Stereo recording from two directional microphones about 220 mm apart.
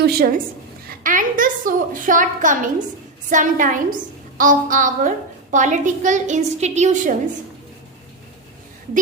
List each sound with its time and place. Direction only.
0.0 s a woman's voice: 45° right (ahead or behind)